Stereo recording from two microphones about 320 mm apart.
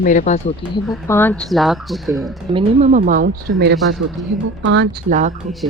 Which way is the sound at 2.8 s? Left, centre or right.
Right.